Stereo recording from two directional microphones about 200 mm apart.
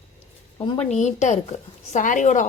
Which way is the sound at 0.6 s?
30° left (ahead or behind).